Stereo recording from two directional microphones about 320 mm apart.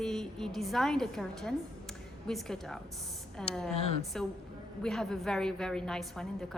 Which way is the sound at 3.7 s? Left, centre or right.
Centre.